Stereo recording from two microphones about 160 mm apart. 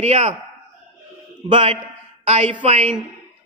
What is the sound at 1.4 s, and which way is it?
A man's voice, 35° right (ahead or behind).